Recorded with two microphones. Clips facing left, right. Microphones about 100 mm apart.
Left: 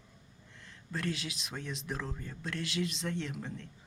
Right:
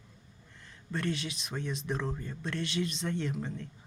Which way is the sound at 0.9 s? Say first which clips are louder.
Right 3 dB; centre (ahead or behind).